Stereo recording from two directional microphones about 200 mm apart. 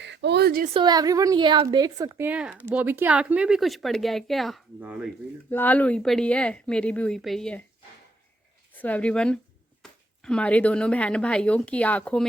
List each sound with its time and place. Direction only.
0.0 s a sound: 60° right (ahead or behind)
0.6 s a woman's voice: 25° right (ahead or behind); by 5.1 s 5° right (ahead or behind)
5.5 s speech: 10° left (ahead or behind)
8.7 s speech: 10° left (ahead or behind)